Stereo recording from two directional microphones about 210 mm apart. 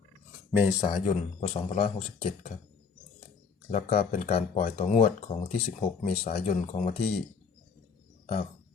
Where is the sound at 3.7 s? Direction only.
30° left (ahead or behind).